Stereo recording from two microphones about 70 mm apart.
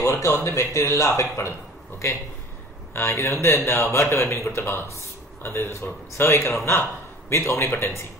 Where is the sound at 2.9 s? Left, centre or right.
Left.